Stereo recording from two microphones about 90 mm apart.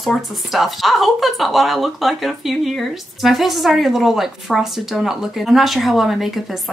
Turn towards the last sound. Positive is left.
turn(degrees=0)  # may be behind; listen again after turning